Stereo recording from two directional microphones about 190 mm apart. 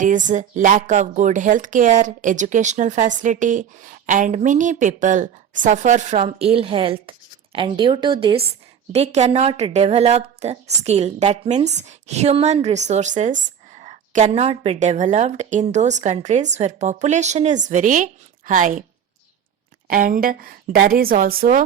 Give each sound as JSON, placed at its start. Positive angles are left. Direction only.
{"t": 0.0, "sound": "speech", "side_deg": -40}
{"t": 19.9, "sound": "a woman's voice", "side_deg": -45}